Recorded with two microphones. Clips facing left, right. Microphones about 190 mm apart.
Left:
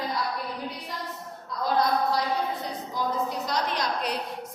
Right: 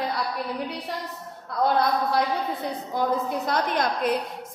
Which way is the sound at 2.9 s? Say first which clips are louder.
Right 4 dB; 55° right (ahead or behind).